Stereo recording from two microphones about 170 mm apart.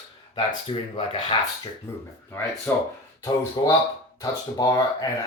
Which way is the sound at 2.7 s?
15° left (ahead or behind).